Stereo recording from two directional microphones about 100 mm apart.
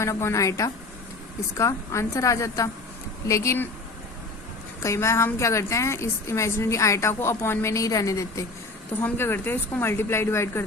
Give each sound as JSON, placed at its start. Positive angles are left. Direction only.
{"t": 0.0, "sound": "a woman's voice", "side_deg": 30}
{"t": 4.8, "sound": "a woman's voice", "side_deg": 30}